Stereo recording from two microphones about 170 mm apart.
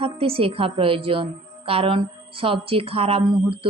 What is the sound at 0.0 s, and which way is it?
A woman's voice, 35° right (ahead or behind).